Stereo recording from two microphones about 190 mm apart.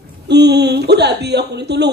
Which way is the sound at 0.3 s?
60° right (ahead or behind).